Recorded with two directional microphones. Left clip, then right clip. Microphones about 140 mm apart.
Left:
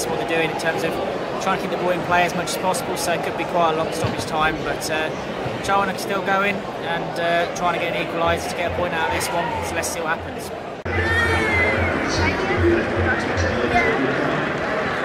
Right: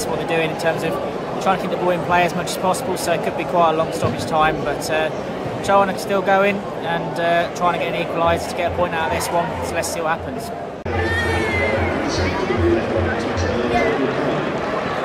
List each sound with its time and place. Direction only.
0.3 s speech: 30° right (ahead or behind)
11.0 s music: centre (ahead or behind)